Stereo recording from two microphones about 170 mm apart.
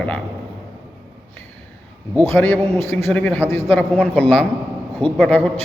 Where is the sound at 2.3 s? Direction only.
10° left (ahead or behind).